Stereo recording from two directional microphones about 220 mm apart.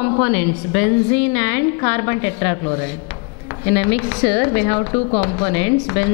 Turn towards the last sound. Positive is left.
turn(degrees=10)  # may be behind; listen again after turning